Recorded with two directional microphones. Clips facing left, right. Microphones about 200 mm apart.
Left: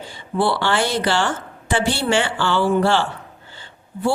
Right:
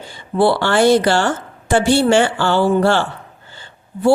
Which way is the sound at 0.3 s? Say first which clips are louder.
Right 5 dB; 45° right (ahead or behind).